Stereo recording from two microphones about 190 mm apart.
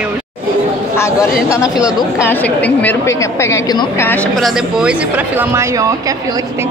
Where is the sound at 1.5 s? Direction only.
20° left (ahead or behind).